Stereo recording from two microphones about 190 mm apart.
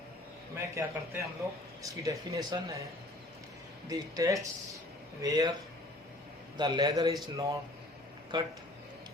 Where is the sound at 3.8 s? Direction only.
15° right (ahead or behind).